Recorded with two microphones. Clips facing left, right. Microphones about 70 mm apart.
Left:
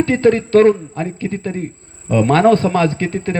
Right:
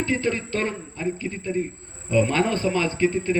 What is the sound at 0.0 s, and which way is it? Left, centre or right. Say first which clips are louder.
A man's voice: left 11 dB; left.